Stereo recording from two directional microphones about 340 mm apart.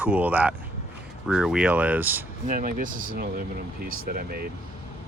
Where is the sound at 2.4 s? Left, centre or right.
Right.